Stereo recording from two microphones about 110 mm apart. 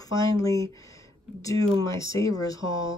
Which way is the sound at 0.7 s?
30° left (ahead or behind).